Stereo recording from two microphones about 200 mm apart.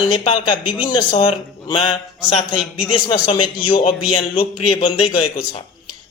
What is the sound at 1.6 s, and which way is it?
Mantra, 25° left (ahead or behind).